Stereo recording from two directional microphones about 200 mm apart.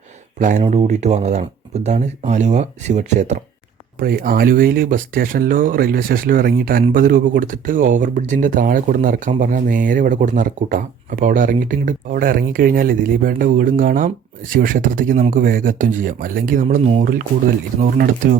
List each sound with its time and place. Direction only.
0.3 s speech: 40° right (ahead or behind)
4.0 s speech: 45° right (ahead or behind)